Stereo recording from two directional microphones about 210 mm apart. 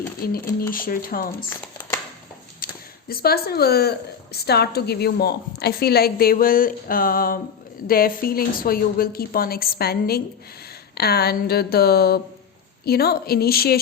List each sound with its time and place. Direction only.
0.2 s a woman's voice: 45° left (ahead or behind)
3.1 s a woman's voice: 45° left (ahead or behind)